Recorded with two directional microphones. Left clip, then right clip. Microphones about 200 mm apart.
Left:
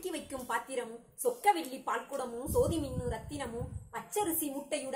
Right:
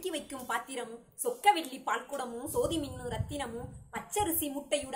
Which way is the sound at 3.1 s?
10° right (ahead or behind).